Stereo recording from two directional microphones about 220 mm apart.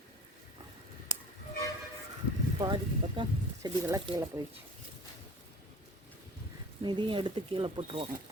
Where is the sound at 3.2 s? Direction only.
20° right (ahead or behind).